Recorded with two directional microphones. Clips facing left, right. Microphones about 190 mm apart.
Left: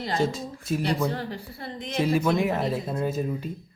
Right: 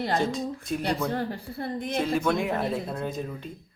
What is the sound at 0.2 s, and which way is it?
Speech, centre (ahead or behind).